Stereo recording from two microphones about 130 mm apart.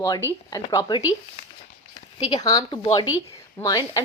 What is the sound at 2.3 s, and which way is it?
Speech, 30° left (ahead or behind).